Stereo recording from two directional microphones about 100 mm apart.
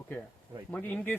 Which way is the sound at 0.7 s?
15° left (ahead or behind).